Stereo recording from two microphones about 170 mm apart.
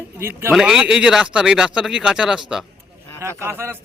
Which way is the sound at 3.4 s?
15° right (ahead or behind).